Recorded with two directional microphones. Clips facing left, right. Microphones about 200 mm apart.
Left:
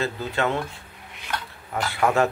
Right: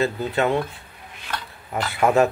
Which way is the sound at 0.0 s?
15° right (ahead or behind).